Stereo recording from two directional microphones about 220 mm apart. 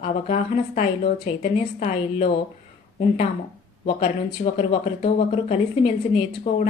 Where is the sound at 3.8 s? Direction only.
30° left (ahead or behind).